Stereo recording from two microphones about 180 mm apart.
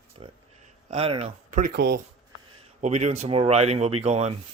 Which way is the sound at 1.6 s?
55° right (ahead or behind).